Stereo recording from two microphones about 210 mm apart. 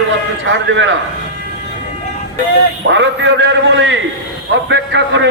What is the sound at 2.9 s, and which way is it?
A man's voice, 60° right (ahead or behind).